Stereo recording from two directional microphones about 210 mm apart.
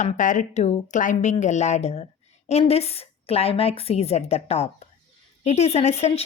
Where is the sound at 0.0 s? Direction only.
35° left (ahead or behind).